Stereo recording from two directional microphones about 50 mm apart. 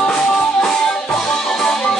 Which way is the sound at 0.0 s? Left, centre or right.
Centre.